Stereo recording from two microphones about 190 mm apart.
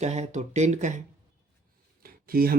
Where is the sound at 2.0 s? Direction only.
50° right (ahead or behind).